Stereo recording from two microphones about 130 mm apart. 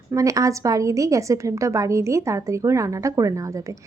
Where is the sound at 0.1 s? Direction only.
25° right (ahead or behind).